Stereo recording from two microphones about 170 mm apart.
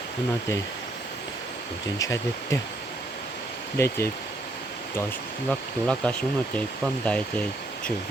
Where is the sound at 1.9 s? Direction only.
20° left (ahead or behind).